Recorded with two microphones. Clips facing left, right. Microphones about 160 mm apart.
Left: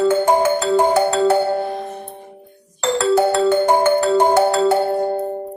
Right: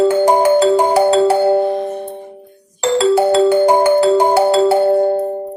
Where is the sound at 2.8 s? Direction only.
10° right (ahead or behind).